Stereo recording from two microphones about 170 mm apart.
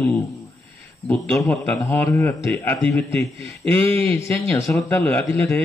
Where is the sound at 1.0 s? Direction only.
5° left (ahead or behind).